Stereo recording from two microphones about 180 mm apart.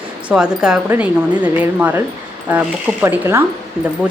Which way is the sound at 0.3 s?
5° right (ahead or behind).